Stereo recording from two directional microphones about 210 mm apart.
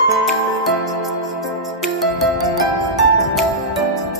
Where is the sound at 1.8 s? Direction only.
Centre (ahead or behind).